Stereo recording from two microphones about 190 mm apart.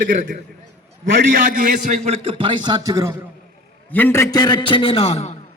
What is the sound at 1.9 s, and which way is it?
Speech, 30° right (ahead or behind).